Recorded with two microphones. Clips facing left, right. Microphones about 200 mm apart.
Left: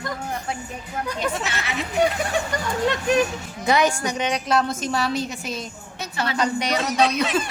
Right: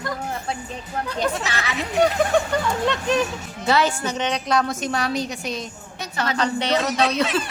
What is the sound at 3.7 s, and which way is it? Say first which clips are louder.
A woman's voice: left 1 dB; 15° left (ahead or behind).